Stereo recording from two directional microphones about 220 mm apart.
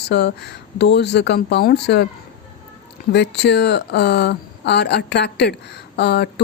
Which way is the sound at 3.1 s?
50° left (ahead or behind).